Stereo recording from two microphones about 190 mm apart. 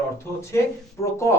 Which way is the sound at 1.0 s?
15° left (ahead or behind).